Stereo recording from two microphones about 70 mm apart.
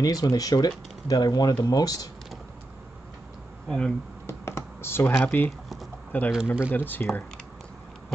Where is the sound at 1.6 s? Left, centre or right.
Left.